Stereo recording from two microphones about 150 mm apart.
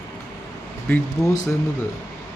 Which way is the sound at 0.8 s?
10° left (ahead or behind).